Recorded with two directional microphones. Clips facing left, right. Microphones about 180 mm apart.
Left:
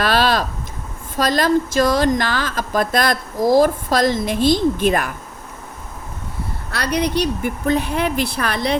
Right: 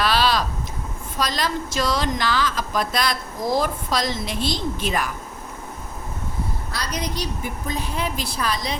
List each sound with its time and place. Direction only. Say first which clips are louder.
0.0 s a sound: left 3 dB; 50° left (ahead or behind)
1.2 s speech: left 8 dB; 50° left (ahead or behind)
6.7 s a woman's voice: left 11 dB; 65° left (ahead or behind)